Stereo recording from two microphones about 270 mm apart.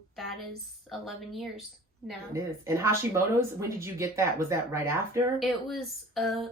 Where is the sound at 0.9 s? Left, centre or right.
Centre.